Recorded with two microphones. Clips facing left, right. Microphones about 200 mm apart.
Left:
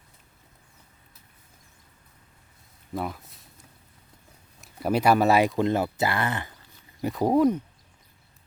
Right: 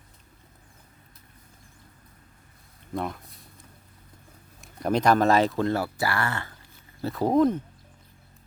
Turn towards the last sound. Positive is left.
turn(degrees=10)  # may be behind; listen again after turning